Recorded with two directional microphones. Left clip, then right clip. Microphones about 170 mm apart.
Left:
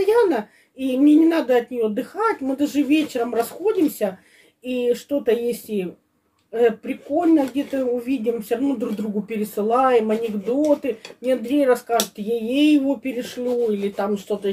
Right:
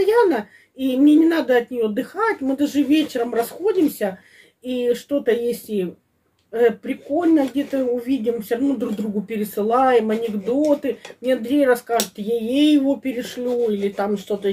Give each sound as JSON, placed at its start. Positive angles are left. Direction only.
{"t": 0.0, "sound": "speech", "side_deg": -15}